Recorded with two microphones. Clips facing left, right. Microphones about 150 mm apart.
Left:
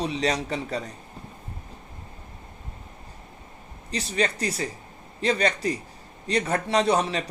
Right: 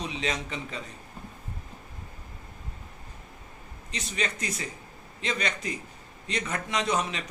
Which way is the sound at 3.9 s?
35° left (ahead or behind).